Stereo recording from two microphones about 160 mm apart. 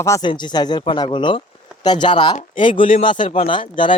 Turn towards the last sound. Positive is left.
turn(degrees=30)  # may be behind; listen again after turning